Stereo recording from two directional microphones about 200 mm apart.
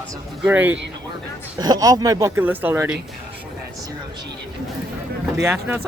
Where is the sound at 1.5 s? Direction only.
20° right (ahead or behind).